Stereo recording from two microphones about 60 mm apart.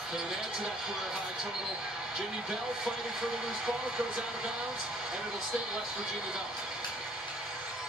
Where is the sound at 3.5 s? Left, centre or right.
Centre.